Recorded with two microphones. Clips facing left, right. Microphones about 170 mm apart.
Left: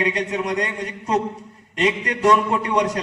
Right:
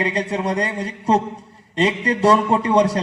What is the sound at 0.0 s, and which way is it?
A man's voice, 35° right (ahead or behind).